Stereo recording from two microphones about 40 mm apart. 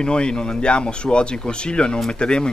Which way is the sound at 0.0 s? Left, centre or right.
Left.